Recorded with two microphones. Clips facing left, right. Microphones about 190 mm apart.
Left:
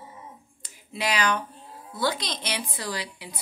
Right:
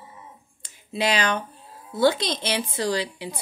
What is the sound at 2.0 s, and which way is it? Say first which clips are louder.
Speech: right 8 dB; 25° right (ahead or behind).